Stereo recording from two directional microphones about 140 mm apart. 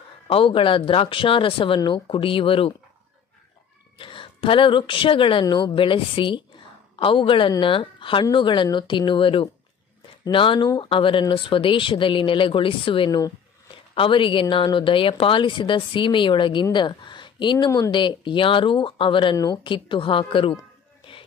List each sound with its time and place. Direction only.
0.3 s a woman's voice: 40° left (ahead or behind)
4.0 s a woman's voice: 40° left (ahead or behind)
17.6 s speech: 20° left (ahead or behind)
17.9 s a woman's voice: 35° left (ahead or behind)
21.0 s music: 40° left (ahead or behind)